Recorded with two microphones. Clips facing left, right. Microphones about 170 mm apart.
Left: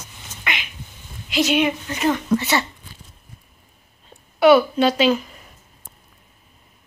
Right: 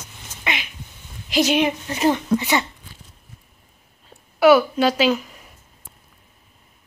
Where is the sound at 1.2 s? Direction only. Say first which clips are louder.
Even; 35° right (ahead or behind).